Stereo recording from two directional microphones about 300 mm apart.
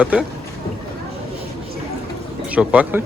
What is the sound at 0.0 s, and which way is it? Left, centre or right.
Speech, centre.